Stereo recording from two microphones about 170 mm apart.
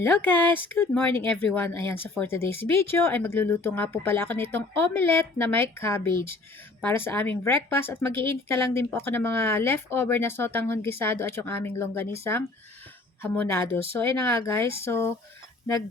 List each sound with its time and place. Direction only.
0.0 s speech: 10° left (ahead or behind)